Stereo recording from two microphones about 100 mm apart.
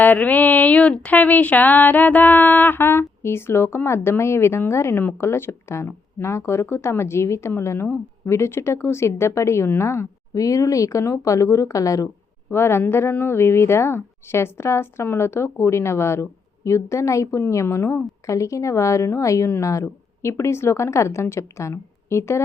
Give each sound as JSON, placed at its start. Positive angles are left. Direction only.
{"t": 0.0, "sound": "speech", "side_deg": 15}